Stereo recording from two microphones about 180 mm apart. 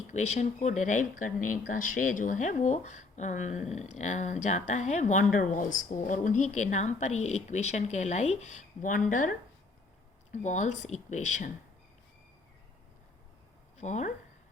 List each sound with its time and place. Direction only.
0.1 s speech: 40° left (ahead or behind)
10.3 s speech: 40° left (ahead or behind)
13.7 s speech: 40° left (ahead or behind)